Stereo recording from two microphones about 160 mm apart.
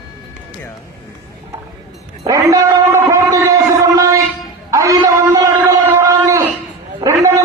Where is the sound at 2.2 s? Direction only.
20° right (ahead or behind).